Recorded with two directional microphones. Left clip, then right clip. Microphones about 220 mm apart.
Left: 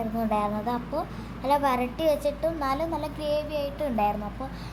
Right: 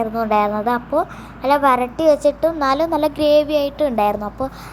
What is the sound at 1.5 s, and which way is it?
A woman's voice, 15° right (ahead or behind).